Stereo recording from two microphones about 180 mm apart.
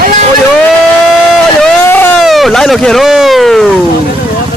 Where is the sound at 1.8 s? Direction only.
10° left (ahead or behind).